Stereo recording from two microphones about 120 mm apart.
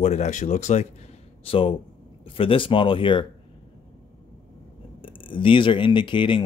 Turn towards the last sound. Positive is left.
turn(degrees=45)  # may be behind; listen again after turning